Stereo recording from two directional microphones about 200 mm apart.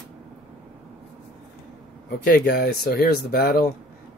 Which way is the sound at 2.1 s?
50° left (ahead or behind).